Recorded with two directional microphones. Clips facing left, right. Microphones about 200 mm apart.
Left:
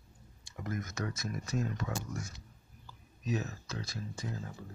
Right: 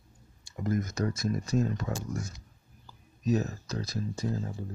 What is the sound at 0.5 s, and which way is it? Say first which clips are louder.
Speech: right 8 dB; 35° right (ahead or behind).